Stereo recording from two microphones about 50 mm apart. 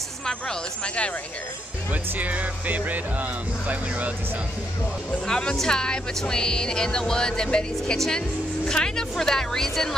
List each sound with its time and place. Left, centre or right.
0.3 s speech: centre
2.1 s speech: right
5.1 s speech: centre